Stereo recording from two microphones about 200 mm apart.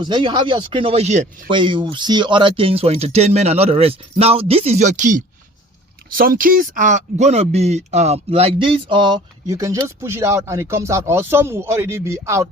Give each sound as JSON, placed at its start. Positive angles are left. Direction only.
{"t": 0.0, "sound": "speech", "side_deg": -25}
{"t": 1.5, "sound": "speech", "side_deg": -25}